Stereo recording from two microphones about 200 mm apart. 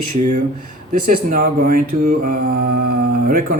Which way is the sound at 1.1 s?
45° right (ahead or behind).